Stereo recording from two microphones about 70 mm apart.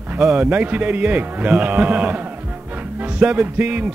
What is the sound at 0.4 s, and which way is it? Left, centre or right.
Speech, right.